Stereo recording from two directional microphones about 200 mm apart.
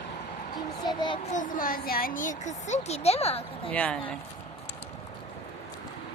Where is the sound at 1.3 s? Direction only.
40° left (ahead or behind).